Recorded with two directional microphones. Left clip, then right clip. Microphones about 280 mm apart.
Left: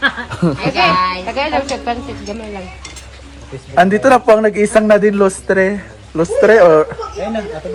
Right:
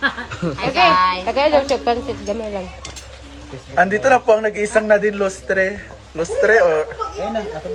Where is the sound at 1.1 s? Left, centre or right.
Right.